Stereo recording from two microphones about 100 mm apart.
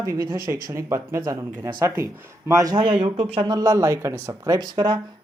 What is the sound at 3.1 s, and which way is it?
Speech, 85° right.